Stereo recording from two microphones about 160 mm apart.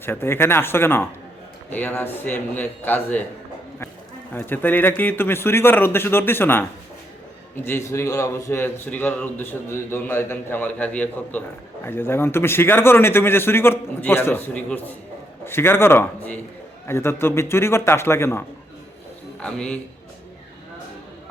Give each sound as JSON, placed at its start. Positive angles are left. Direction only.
{"t": 0.0, "sound": "a man's voice", "side_deg": 15}
{"t": 4.3, "sound": "a man's voice", "side_deg": 10}